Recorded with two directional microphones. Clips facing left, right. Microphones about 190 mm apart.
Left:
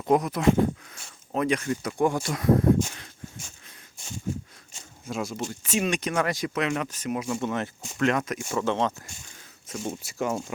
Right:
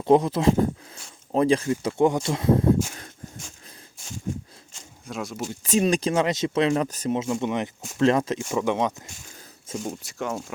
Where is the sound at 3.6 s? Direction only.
35° right (ahead or behind).